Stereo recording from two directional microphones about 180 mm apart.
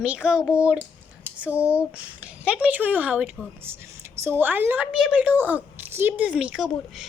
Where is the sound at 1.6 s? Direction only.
5° right (ahead or behind).